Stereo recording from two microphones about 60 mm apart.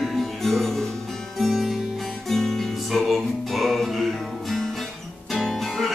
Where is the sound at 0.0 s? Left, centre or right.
Centre.